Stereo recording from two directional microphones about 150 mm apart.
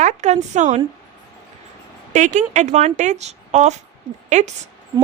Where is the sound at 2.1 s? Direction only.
55° right (ahead or behind).